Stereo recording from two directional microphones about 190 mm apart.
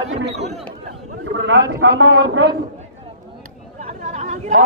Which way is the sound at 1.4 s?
70° right (ahead or behind).